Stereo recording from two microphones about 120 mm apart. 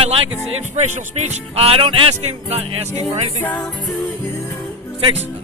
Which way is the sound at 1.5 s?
50° right (ahead or behind).